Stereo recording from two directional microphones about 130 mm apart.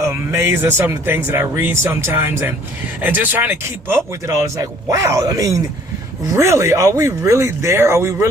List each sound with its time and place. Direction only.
0.0 s speech: 20° right (ahead or behind)